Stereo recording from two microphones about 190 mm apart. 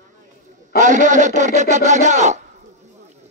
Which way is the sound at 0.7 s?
40° right (ahead or behind).